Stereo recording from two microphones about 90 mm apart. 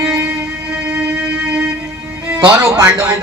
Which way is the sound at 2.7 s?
35° right (ahead or behind).